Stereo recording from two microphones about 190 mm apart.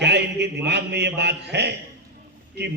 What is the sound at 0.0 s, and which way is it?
A man's voice, 65° right (ahead or behind).